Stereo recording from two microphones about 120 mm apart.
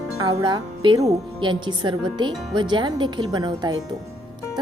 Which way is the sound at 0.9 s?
30° right (ahead or behind).